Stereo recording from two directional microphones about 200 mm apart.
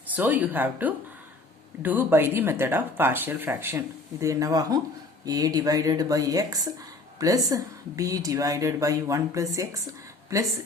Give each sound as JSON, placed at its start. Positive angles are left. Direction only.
{"t": 0.1, "sound": "speech", "side_deg": -10}